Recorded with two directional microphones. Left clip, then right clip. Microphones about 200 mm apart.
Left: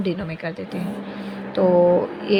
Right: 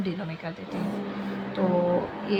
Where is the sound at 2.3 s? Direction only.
35° left (ahead or behind).